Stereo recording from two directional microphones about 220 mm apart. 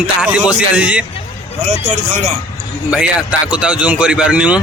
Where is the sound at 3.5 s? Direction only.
5° right (ahead or behind).